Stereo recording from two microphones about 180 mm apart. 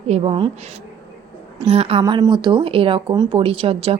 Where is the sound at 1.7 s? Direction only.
30° right (ahead or behind).